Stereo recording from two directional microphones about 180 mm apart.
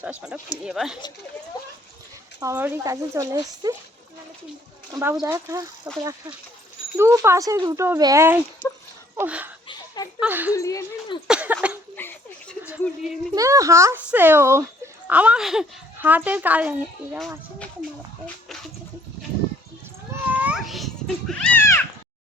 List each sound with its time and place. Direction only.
0.0 s speech: 5° right (ahead or behind)
2.4 s a child's voice: 15° right (ahead or behind)
4.9 s a child's voice: 15° right (ahead or behind)
9.6 s a sound: 20° left (ahead or behind)
10.2 s a child's voice: 10° right (ahead or behind)
10.5 s speech: 15° left (ahead or behind)
11.3 s a sound: 10° right (ahead or behind)
11.9 s a sound: 10° left (ahead or behind)
13.3 s a child's voice: 20° right (ahead or behind)
17.2 s speech: centre (ahead or behind)
20.3 s cat: 5° right (ahead or behind)
21.6 s cat: 15° left (ahead or behind)